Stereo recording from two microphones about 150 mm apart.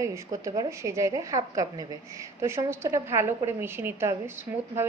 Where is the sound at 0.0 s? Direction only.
20° right (ahead or behind).